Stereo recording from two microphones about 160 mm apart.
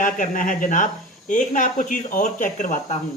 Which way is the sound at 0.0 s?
55° left (ahead or behind).